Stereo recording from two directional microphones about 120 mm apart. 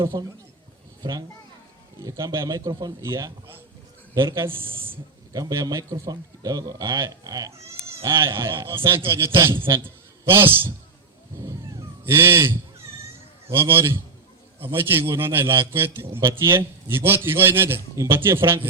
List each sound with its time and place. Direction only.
0.0 s a man's voice: 40° right (ahead or behind)
2.0 s a man's voice: 25° right (ahead or behind)